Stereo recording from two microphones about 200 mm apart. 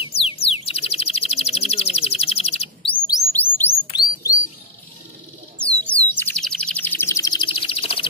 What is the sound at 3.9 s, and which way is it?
Bird, 20° left (ahead or behind).